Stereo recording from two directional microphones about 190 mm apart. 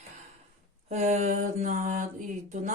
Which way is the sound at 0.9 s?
40° right (ahead or behind).